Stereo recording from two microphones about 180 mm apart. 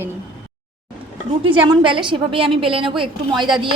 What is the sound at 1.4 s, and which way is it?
A woman's voice, 30° right (ahead or behind).